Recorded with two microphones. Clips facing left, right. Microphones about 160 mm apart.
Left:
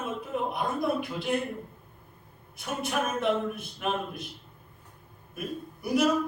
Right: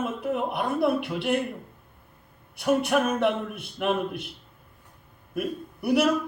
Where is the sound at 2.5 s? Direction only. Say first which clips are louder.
Right 9 dB; 65° right (ahead or behind).